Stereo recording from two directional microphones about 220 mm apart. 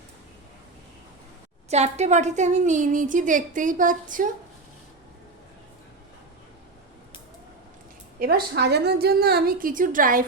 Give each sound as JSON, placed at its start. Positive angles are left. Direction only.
{"t": 1.7, "sound": "a woman's voice", "side_deg": -30}
{"t": 8.2, "sound": "a woman's voice", "side_deg": -45}